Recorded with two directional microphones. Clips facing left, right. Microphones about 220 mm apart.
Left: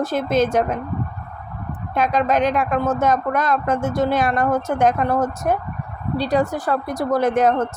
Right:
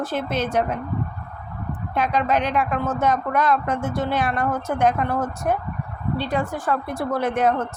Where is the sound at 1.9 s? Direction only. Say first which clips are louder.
Left 3 dB; 45° left (ahead or behind).